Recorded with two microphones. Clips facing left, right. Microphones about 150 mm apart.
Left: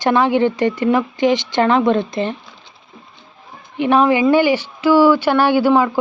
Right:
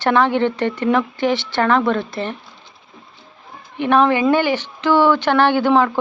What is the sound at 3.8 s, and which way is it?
Speech, 10° left (ahead or behind).